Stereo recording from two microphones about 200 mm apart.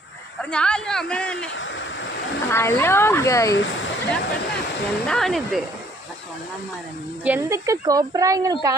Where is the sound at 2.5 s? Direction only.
10° left (ahead or behind).